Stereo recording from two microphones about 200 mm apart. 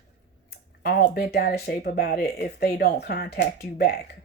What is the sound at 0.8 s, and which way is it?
Speech, 50° left (ahead or behind).